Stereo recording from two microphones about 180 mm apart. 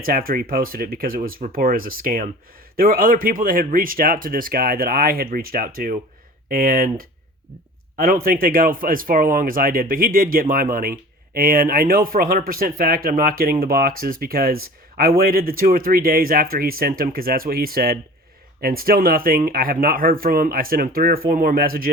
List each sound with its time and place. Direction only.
0.0 s speech: 55° right (ahead or behind)